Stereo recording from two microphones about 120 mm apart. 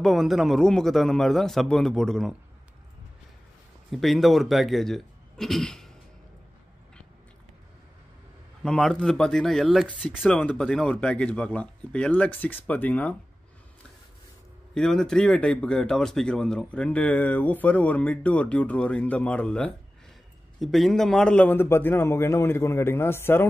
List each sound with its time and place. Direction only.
0.0 s a man's voice: centre (ahead or behind)
3.9 s speech: centre (ahead or behind)
8.6 s a man's voice: 5° left (ahead or behind)
14.7 s a man's voice: 5° left (ahead or behind)
21.5 s a man's voice: 20° left (ahead or behind)